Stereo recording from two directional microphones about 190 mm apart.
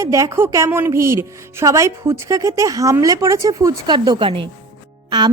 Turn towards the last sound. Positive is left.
turn(degrees=-20)  # may be behind; listen again after turning